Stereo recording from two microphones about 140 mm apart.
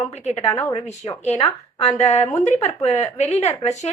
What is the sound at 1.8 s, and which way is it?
Speech, 50° left (ahead or behind).